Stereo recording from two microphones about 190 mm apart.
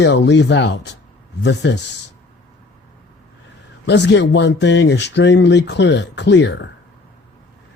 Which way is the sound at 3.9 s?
65° left (ahead or behind).